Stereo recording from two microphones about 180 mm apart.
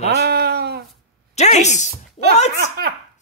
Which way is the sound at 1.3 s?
40° left (ahead or behind).